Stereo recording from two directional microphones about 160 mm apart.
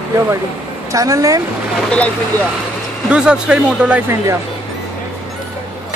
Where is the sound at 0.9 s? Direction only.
20° right (ahead or behind).